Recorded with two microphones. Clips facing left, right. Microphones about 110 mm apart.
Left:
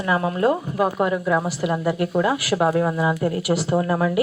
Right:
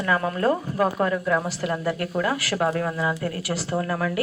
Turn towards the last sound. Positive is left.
turn(degrees=20)  # may be behind; listen again after turning